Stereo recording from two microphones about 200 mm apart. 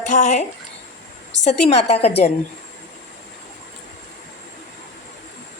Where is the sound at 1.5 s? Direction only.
30° left (ahead or behind).